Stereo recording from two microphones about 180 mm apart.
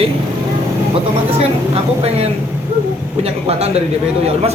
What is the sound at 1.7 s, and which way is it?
A man's voice, 35° right (ahead or behind).